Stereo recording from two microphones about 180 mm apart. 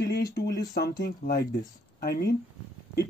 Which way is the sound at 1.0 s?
60° left (ahead or behind).